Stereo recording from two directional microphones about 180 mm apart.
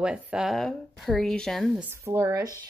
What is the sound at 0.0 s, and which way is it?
A woman's voice, 5° right (ahead or behind).